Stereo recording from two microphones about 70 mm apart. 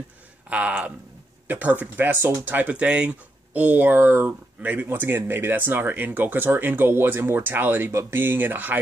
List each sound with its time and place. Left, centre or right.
0.5 s speech: centre